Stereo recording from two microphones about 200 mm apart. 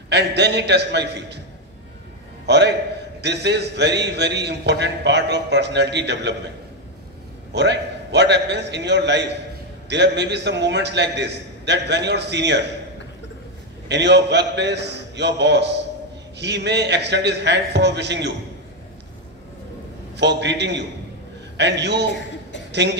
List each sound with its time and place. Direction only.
0.1 s a man's voice: 55° right (ahead or behind)
2.4 s a man's voice: 60° right (ahead or behind)
7.5 s a man's voice: 60° right (ahead or behind)
13.8 s a man's voice: 60° right (ahead or behind)
20.2 s a man's voice: 60° right (ahead or behind)